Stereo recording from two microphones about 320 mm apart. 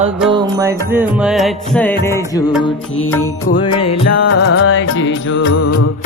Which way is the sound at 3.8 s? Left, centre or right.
Left.